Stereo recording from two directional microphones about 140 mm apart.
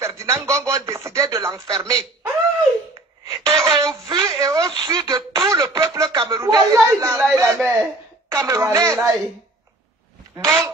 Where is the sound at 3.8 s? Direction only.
25° right (ahead or behind).